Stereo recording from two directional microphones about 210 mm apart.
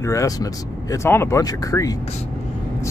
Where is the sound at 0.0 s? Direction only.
15° left (ahead or behind).